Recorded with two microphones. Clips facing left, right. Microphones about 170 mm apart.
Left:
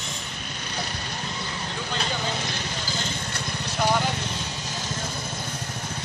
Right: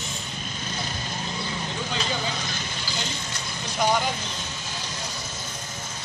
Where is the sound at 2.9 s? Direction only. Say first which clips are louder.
Left 1 dB; 60° left (ahead or behind).